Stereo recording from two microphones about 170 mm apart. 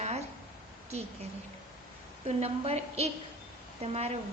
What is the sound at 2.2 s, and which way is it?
A woman's voice, 35° right (ahead or behind).